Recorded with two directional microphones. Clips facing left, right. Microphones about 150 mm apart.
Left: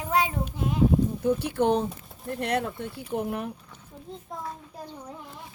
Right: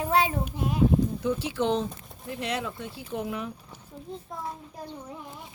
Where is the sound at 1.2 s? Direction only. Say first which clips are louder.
Left 3 dB; 55° left (ahead or behind).